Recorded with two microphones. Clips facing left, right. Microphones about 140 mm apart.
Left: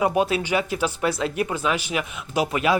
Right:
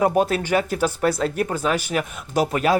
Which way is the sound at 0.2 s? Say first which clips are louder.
Right 2 dB; 45° right (ahead or behind).